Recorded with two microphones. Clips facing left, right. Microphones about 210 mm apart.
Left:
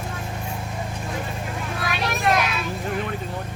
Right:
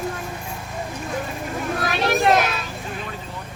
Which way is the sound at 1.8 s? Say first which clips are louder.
Right 4 dB; 35° right (ahead or behind).